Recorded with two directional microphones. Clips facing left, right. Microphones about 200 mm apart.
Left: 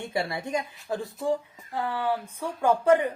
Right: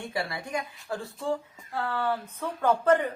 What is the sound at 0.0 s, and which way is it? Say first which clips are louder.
Speech: left 3 dB; 25° left (ahead or behind).